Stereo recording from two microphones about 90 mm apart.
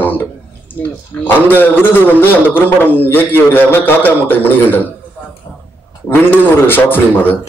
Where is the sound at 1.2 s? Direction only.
25° left (ahead or behind).